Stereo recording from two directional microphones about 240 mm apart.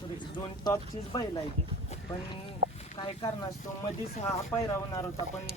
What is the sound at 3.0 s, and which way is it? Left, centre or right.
Speech, left.